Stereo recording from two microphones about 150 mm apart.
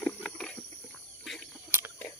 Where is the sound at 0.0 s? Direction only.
5° left (ahead or behind).